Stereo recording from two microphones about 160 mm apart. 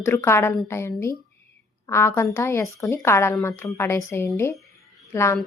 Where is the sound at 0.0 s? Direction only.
15° left (ahead or behind).